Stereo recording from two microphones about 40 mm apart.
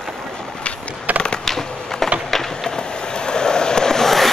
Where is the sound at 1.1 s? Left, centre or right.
Right.